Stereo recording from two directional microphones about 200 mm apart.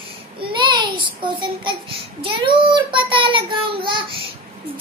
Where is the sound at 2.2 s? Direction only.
25° right (ahead or behind).